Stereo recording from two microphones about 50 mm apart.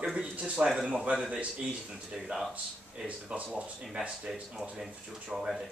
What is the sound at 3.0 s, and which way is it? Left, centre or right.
Speech, right.